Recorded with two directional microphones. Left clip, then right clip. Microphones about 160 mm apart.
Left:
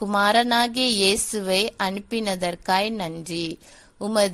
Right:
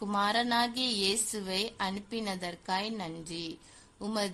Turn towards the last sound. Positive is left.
turn(degrees=45)  # may be behind; listen again after turning